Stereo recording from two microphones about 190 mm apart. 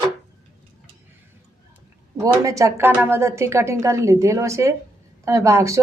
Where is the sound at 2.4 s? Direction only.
15° right (ahead or behind).